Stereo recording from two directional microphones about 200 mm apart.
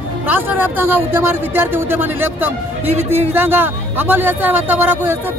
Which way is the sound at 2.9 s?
30° right (ahead or behind).